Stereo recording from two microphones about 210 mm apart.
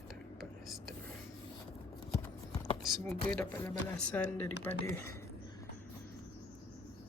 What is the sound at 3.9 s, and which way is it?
Speech, 5° left (ahead or behind).